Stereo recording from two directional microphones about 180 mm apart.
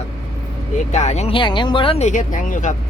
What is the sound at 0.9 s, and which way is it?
Speech, 40° left (ahead or behind).